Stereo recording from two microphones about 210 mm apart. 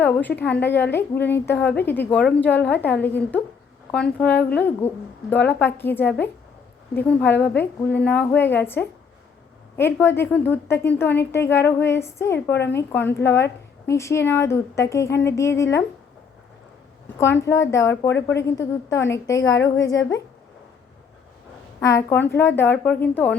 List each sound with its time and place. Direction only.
0.0 s a woman's voice: 10° left (ahead or behind)
17.2 s a woman's voice: 10° left (ahead or behind)
21.8 s a woman's voice: 15° left (ahead or behind)